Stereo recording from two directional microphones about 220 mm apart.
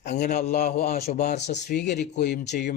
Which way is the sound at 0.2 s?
40° left (ahead or behind).